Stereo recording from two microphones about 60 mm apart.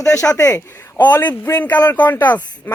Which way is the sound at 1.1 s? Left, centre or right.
Left.